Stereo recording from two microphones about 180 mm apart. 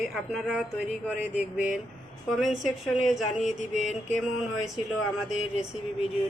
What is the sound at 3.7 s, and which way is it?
Mantra, 40° left (ahead or behind).